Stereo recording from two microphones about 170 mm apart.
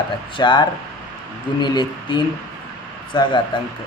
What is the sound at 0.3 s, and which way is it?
Speech, 25° left (ahead or behind).